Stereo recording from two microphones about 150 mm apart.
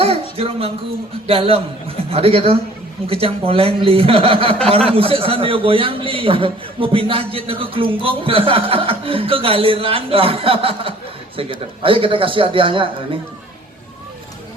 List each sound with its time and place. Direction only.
0.0 s a man's voice: 40° right (ahead or behind)